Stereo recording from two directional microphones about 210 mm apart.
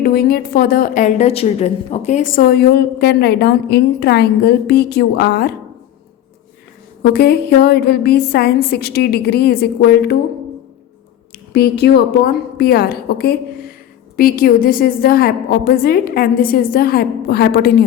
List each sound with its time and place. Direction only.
0.0 s a woman's voice: 45° left (ahead or behind)
7.0 s a woman's voice: 50° left (ahead or behind)
11.5 s a woman's voice: 50° left (ahead or behind)